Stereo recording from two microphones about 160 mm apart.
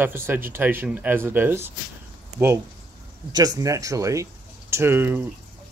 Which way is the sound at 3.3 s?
20° right (ahead or behind).